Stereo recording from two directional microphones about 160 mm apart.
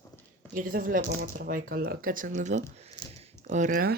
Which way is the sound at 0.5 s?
60° right (ahead or behind).